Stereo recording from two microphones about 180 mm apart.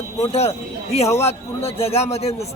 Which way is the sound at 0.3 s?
35° left (ahead or behind).